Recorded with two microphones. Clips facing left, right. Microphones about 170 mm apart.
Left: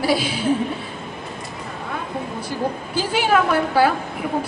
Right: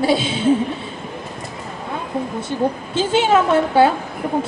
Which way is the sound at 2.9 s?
25° right (ahead or behind).